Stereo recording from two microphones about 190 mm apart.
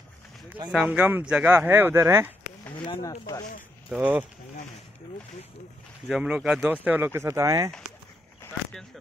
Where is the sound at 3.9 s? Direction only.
10° right (ahead or behind).